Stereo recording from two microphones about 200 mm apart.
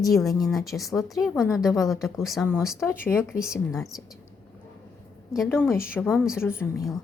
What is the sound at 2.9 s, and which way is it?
Speech, 10° left (ahead or behind).